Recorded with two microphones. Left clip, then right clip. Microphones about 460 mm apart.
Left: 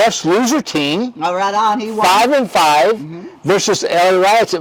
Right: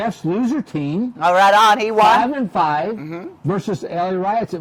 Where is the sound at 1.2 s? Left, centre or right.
Right.